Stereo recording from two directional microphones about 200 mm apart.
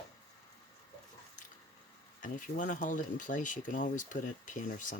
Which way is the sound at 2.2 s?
40° left (ahead or behind).